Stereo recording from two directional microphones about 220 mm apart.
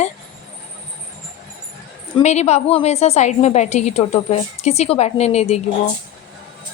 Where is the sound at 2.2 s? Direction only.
30° left (ahead or behind).